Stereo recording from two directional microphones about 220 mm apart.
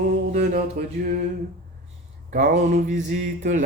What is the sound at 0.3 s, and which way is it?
Music, 40° right (ahead or behind).